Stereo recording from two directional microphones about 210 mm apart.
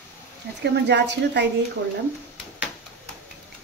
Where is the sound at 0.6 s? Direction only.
55° right (ahead or behind).